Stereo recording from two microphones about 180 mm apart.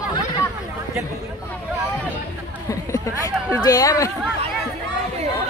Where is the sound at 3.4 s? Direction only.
20° left (ahead or behind).